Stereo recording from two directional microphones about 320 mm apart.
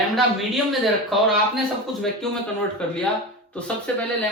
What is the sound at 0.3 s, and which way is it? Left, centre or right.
A man's voice, centre.